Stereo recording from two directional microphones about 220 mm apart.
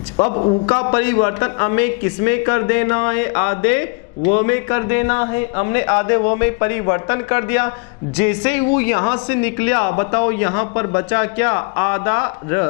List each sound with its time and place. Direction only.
0.2 s a man's voice: 30° left (ahead or behind)